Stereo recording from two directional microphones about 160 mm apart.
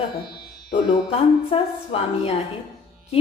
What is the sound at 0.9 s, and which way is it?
Speech, 35° left (ahead or behind).